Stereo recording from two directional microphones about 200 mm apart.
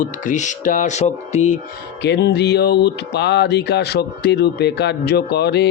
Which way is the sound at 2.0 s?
60° left (ahead or behind).